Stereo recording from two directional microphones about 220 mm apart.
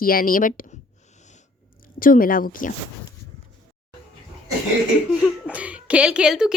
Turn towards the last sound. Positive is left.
turn(degrees=-5)  # may be behind; listen again after turning